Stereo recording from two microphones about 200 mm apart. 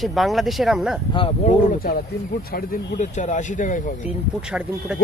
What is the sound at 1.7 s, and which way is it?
Speech, 45° left (ahead or behind).